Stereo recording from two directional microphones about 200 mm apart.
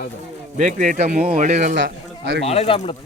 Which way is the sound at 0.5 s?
40° right (ahead or behind).